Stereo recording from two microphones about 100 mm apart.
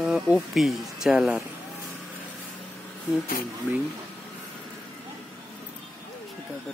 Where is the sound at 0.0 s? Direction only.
5° right (ahead or behind).